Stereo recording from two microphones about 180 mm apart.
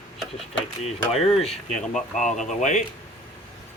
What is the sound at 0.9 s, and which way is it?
Speech, 35° left (ahead or behind).